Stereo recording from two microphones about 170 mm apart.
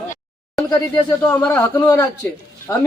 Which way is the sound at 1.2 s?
15° left (ahead or behind).